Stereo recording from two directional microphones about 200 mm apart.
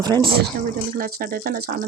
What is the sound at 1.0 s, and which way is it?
Speech, 45° right (ahead or behind).